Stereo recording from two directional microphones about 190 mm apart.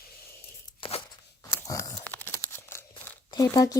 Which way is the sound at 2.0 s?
10° left (ahead or behind).